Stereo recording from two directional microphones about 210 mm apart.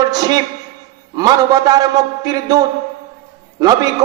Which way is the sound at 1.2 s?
20° right (ahead or behind).